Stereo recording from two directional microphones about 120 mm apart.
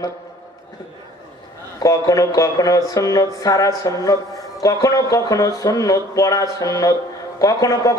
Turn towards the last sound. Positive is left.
turn(degrees=30)  # may be behind; listen again after turning